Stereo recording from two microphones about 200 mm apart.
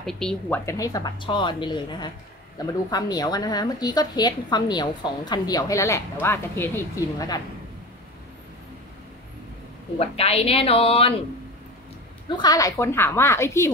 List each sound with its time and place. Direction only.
0.0 s a woman's voice: 5° left (ahead or behind)
0.7 s a woman's voice: 15° left (ahead or behind)
9.9 s a woman's voice: 30° left (ahead or behind)
12.3 s a woman's voice: 20° left (ahead or behind)